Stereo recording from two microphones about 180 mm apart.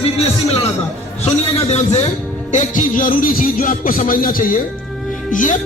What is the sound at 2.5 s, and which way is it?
Music, 45° left (ahead or behind).